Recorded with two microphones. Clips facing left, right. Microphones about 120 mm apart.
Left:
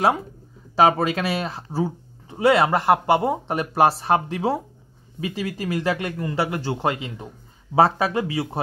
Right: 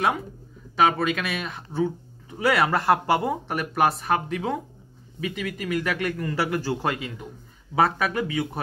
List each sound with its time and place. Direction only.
0.7 s speech: 35° left (ahead or behind)